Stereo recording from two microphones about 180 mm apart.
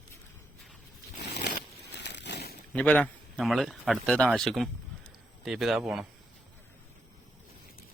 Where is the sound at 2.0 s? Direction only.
70° left (ahead or behind).